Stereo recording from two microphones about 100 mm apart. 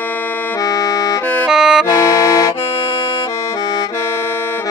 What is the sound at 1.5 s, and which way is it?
Accordion, 5° right (ahead or behind).